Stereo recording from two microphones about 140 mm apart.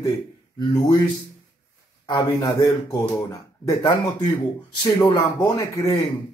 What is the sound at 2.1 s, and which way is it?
Speech, 30° left (ahead or behind).